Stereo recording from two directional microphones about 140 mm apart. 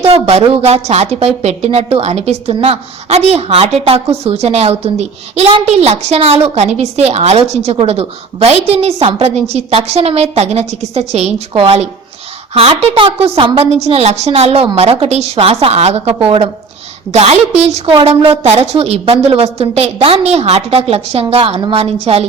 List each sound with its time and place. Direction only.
0.0 s a woman's voice: 45° right (ahead or behind)